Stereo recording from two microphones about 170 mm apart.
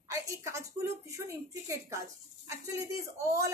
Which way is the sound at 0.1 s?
15° right (ahead or behind).